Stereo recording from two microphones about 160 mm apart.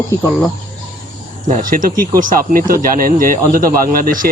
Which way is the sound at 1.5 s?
55° right (ahead or behind).